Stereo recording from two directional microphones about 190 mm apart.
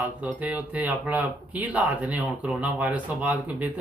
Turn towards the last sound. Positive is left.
turn(degrees=-10)  # may be behind; listen again after turning